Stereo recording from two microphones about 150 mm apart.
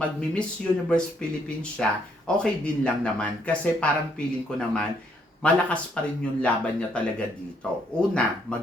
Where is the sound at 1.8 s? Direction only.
5° left (ahead or behind).